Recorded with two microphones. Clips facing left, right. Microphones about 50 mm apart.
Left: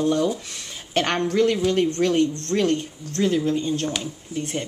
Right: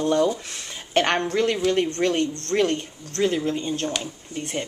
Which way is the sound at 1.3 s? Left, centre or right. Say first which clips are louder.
Left 4 dB; centre.